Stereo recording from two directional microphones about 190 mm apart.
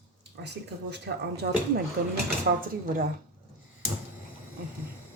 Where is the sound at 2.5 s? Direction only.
45° right (ahead or behind).